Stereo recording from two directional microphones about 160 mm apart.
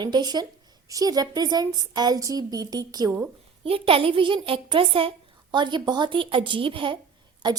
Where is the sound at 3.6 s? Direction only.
35° right (ahead or behind).